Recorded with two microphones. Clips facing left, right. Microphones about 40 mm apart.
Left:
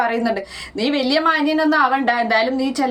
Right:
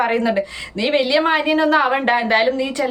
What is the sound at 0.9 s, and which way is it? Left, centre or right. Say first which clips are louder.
A woman's voice: right 1 dB; right.